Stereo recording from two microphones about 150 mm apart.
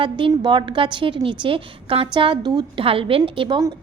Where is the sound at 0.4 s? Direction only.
30° right (ahead or behind).